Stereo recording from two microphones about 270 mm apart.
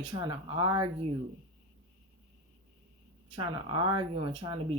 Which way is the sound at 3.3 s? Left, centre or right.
Centre.